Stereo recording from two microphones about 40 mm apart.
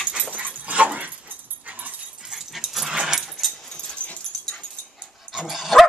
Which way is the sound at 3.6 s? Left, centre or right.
Centre.